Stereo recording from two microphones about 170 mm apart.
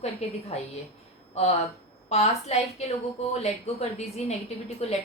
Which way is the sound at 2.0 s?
40° left (ahead or behind).